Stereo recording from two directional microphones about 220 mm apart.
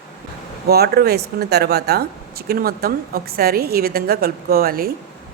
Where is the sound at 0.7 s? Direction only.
45° right (ahead or behind).